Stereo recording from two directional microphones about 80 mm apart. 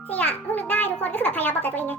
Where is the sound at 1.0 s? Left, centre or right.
Centre.